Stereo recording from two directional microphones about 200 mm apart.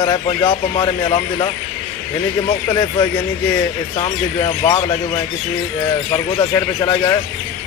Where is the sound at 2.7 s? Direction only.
20° left (ahead or behind).